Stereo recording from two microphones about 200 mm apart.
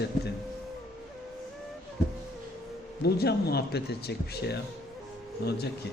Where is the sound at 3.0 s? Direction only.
55° left (ahead or behind).